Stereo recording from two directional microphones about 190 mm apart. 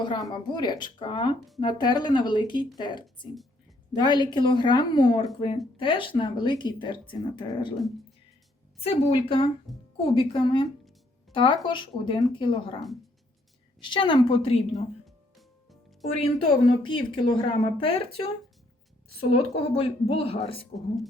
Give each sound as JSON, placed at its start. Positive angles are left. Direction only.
{"t": 0.0, "sound": "a woman's voice", "side_deg": 20}
{"t": 8.8, "sound": "a woman's voice", "side_deg": 30}
{"t": 9.7, "sound": "speech", "side_deg": 0}
{"t": 10.2, "sound": "a woman's voice", "side_deg": 25}
{"t": 15.0, "sound": "music", "side_deg": 0}
{"t": 16.4, "sound": "a woman's voice", "side_deg": 25}
{"t": 19.3, "sound": "a woman's voice", "side_deg": 30}
{"t": 20.7, "sound": "speech", "side_deg": 0}